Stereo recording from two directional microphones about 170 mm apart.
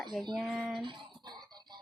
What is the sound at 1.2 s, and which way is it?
Music, 25° right (ahead or behind).